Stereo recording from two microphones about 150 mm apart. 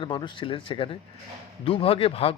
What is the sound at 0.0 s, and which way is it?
Speech, 30° left (ahead or behind).